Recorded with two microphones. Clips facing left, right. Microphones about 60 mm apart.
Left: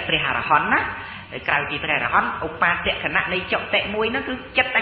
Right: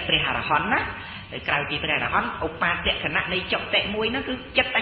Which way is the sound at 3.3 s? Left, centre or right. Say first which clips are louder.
Left 3 dB; left.